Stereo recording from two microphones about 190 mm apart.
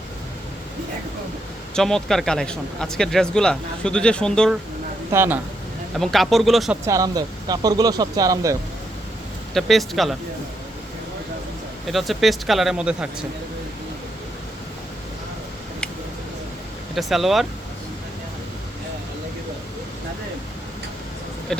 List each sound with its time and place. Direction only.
1.7 s speech: centre (ahead or behind)
5.1 s speech: 10° right (ahead or behind)
6.0 s speech: centre (ahead or behind)
6.8 s speech: 20° right (ahead or behind)
9.6 s speech: centre (ahead or behind)
11.9 s speech: centre (ahead or behind)
16.9 s speech: centre (ahead or behind)
21.5 s speech: 5° left (ahead or behind)